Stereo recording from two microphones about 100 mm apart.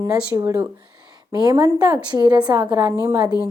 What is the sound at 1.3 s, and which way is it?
A woman's voice, 45° right (ahead or behind).